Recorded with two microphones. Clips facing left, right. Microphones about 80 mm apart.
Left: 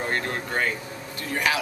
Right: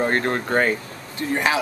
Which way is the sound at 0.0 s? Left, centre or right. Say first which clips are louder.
Right 6 dB; right.